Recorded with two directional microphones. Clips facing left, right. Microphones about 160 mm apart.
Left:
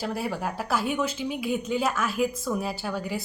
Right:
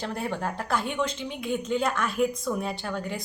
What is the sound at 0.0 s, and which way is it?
A woman's voice, 5° left (ahead or behind).